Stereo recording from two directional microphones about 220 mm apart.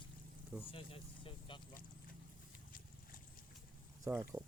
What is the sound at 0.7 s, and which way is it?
Vehicle, 25° left (ahead or behind).